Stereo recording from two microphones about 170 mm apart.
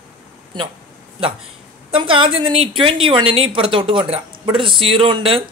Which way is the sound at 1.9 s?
30° right (ahead or behind).